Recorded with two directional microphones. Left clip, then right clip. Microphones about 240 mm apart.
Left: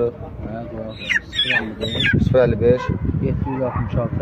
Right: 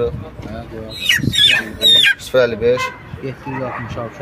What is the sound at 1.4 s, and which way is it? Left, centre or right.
Speech, left.